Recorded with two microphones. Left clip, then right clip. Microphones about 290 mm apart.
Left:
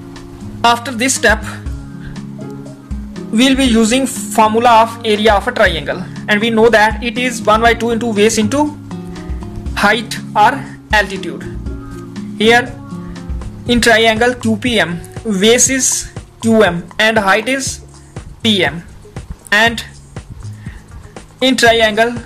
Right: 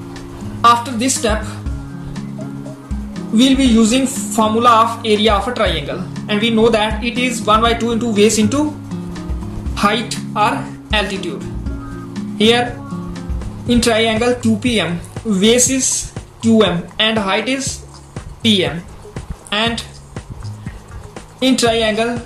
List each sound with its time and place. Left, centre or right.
0.7 s speech: left
3.3 s speech: left
8.8 s music: centre
9.8 s speech: left
11.6 s music: centre
12.4 s speech: left
12.9 s music: centre
13.7 s speech: left
21.4 s speech: left